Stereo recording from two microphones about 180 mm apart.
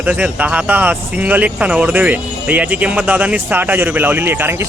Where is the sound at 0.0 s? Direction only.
10° right (ahead or behind).